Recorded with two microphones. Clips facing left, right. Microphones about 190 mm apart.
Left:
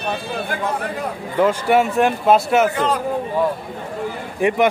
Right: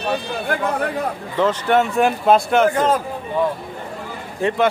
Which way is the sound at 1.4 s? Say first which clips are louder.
Left 1 dB; 10° left (ahead or behind).